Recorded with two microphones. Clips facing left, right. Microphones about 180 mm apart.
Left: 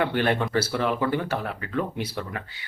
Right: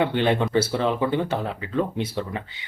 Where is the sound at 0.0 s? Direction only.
20° right (ahead or behind).